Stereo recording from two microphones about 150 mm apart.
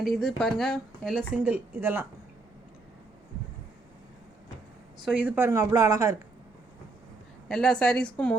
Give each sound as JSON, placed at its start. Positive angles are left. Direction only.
{"t": 0.0, "sound": "speech", "side_deg": 0}
{"t": 5.0, "sound": "speech", "side_deg": -10}
{"t": 7.4, "sound": "speech", "side_deg": 5}